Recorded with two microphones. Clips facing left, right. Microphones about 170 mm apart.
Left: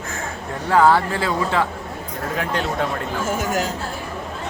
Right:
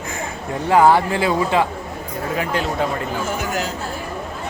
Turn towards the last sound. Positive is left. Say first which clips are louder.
# left 1 dB
turn(degrees=45)  # may be behind; listen again after turning